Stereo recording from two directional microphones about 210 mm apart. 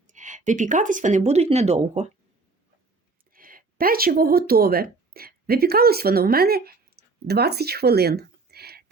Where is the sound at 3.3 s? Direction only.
40° right (ahead or behind).